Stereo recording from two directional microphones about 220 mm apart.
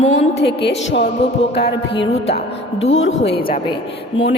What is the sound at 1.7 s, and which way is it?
Speech, 50° left (ahead or behind).